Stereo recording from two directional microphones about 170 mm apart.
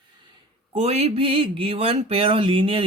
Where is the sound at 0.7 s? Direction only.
40° right (ahead or behind).